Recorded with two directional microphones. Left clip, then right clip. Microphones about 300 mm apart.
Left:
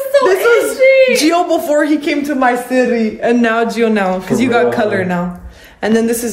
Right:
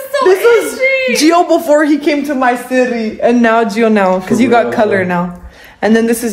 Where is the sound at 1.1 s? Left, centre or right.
Centre.